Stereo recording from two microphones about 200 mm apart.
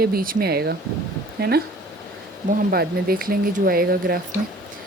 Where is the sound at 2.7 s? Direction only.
50° right (ahead or behind).